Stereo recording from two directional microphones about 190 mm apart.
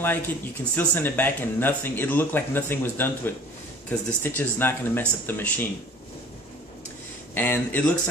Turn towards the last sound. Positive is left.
turn(degrees=10)  # may be behind; listen again after turning